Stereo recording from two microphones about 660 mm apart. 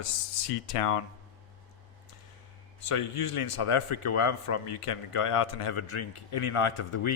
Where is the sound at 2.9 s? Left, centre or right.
Left.